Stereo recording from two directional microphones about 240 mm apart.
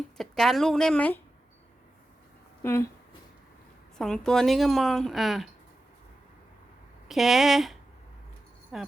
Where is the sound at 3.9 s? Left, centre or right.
Centre.